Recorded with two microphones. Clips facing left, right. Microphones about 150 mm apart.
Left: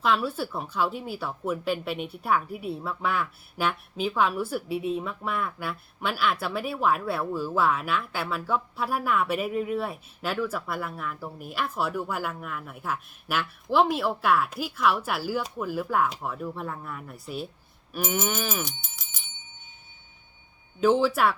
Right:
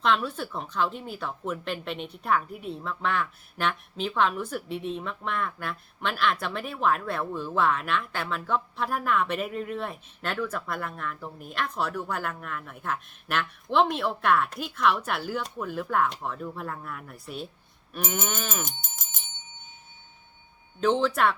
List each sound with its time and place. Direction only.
0.0 s speech: 5° left (ahead or behind)
18.8 s bell: 50° right (ahead or behind)
20.8 s speech: 5° left (ahead or behind)